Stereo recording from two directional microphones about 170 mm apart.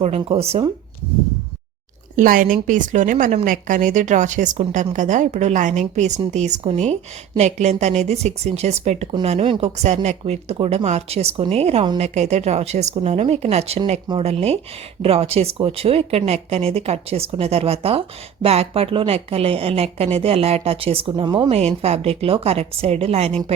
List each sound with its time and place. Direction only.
0.0 s a woman's voice: 35° right (ahead or behind)
2.1 s a woman's voice: 55° right (ahead or behind); by 23.4 s 35° right (ahead or behind)